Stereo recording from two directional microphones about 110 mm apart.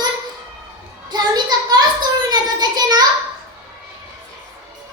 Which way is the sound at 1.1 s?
40° right (ahead or behind).